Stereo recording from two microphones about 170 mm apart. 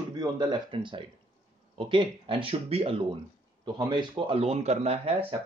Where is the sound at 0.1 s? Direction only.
25° right (ahead or behind).